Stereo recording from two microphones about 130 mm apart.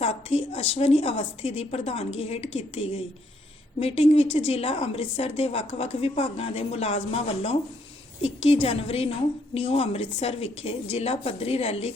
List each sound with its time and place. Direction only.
0.0 s a woman's voice: 55° left (ahead or behind)